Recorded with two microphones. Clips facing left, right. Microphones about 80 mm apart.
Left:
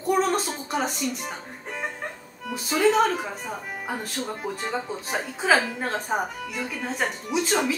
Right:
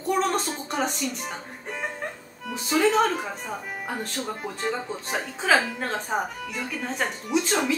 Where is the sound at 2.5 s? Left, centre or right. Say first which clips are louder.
Left 1 dB; centre.